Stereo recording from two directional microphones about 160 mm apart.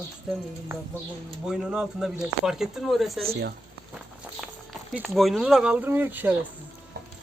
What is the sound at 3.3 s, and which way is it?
Speech, 90° right.